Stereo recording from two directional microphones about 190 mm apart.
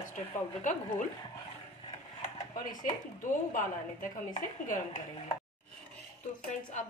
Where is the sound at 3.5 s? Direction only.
45° left (ahead or behind).